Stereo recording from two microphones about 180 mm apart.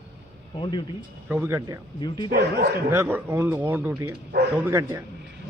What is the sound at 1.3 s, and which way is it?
Speech, 10° right (ahead or behind).